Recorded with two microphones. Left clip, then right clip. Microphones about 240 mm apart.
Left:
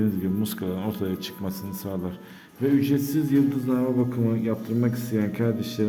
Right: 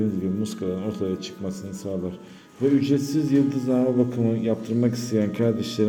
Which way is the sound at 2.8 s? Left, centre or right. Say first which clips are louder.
Right 1 dB; centre.